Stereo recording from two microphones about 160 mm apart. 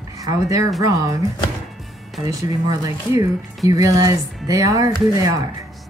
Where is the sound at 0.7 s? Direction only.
20° right (ahead or behind).